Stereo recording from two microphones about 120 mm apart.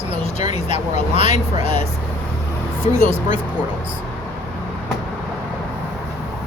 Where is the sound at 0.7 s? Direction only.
50° right (ahead or behind).